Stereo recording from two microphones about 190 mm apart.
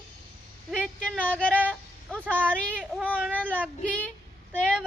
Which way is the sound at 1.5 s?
10° right (ahead or behind).